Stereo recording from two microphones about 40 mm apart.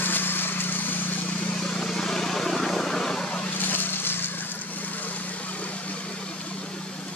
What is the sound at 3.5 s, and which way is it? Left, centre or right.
Vehicle, left.